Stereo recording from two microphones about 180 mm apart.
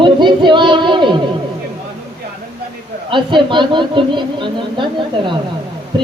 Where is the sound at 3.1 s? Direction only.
25° right (ahead or behind).